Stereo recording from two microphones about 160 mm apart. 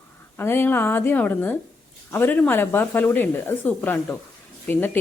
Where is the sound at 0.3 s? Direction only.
15° left (ahead or behind).